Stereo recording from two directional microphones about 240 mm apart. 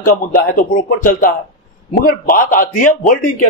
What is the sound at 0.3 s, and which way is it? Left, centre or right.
A man's voice, left.